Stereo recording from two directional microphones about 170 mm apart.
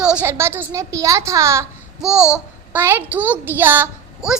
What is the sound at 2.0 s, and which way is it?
A child's voice, 5° right (ahead or behind).